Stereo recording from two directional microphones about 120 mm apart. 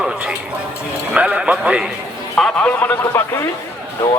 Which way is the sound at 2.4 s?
5° left (ahead or behind).